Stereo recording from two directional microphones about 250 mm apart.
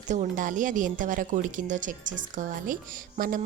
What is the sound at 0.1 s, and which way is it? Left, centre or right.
A woman's voice, right.